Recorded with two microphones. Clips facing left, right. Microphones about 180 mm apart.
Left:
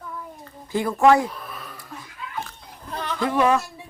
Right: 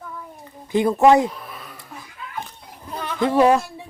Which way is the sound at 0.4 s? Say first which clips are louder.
Right 6 dB; 20° right (ahead or behind).